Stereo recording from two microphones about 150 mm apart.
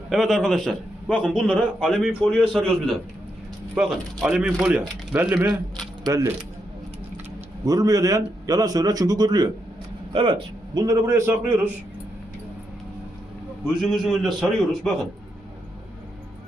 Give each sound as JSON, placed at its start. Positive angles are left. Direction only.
{"t": 0.1, "sound": "a man's voice", "side_deg": 0}
{"t": 6.1, "sound": "a man's voice", "side_deg": -20}
{"t": 7.6, "sound": "a man's voice", "side_deg": -25}
{"t": 13.8, "sound": "a man's voice", "side_deg": 0}